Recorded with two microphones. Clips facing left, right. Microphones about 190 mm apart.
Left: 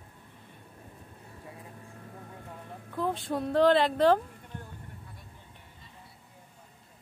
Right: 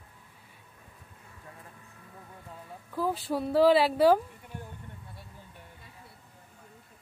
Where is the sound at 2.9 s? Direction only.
5° right (ahead or behind).